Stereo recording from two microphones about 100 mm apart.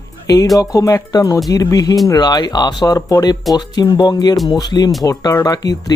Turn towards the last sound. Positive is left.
turn(degrees=40)  # may be behind; listen again after turning